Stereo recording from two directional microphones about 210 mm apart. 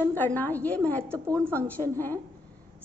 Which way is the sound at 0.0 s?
10° left (ahead or behind).